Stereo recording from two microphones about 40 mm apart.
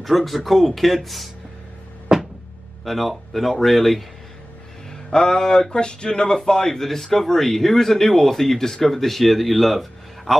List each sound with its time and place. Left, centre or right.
0.0 s speech: centre
2.1 s a sound: centre
2.8 s speech: centre
4.9 s speech: centre